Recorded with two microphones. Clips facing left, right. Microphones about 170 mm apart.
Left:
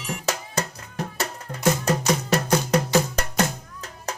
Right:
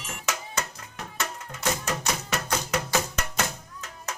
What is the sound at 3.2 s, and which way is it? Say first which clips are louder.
Music: left 5 dB; 35° left (ahead or behind).